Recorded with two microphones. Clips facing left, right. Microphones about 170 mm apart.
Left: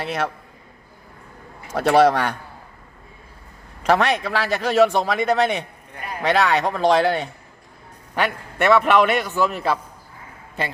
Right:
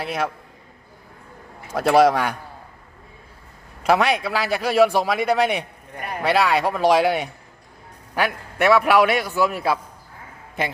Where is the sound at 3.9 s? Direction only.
5° right (ahead or behind).